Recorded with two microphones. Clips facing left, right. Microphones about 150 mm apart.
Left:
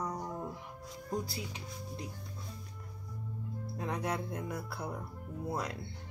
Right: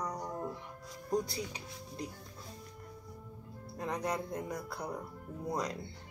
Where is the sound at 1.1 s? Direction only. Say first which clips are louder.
Right 4 dB; 5° left (ahead or behind).